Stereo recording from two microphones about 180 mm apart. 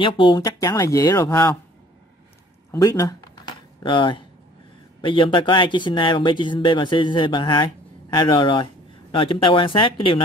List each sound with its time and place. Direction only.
0.0 s speech: 25° left (ahead or behind)
2.7 s a sound: 15° left (ahead or behind)
5.0 s speech: 30° left (ahead or behind)